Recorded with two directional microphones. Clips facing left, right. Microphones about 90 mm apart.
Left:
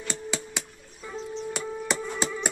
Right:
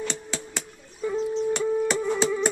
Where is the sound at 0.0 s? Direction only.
10° left (ahead or behind).